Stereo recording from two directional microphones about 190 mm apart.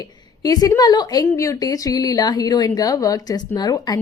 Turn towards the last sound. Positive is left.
turn(degrees=20)  # may be behind; listen again after turning